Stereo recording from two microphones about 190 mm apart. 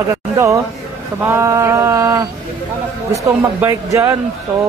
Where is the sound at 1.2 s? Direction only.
15° right (ahead or behind).